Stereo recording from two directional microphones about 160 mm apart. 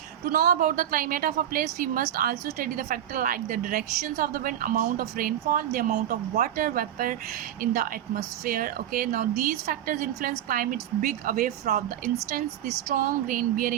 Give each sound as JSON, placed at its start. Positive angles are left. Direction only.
{"t": 0.3, "sound": "a woman's voice", "side_deg": -65}